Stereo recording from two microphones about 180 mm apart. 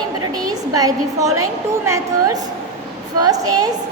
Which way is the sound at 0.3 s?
20° right (ahead or behind).